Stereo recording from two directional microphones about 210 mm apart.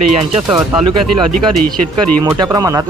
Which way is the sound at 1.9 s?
20° right (ahead or behind).